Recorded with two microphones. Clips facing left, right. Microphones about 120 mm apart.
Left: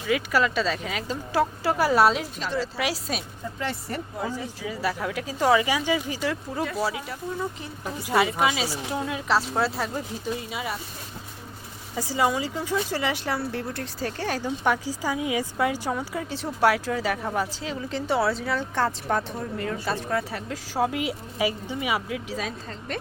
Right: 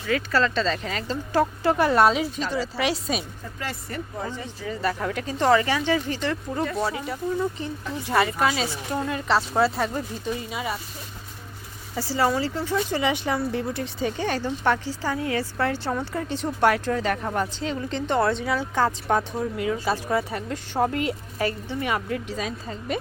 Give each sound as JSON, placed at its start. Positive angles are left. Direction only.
{"t": 0.1, "sound": "speech", "side_deg": 10}
{"t": 3.6, "sound": "speech", "side_deg": 30}
{"t": 4.2, "sound": "speech", "side_deg": 5}
{"t": 11.9, "sound": "speech", "side_deg": 15}
{"t": 12.7, "sound": "speech", "side_deg": 0}